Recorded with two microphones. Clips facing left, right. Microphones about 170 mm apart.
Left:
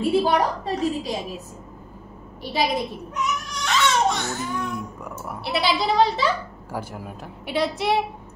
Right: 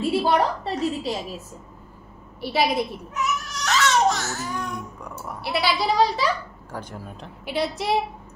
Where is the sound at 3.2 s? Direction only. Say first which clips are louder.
Even; 5° right (ahead or behind).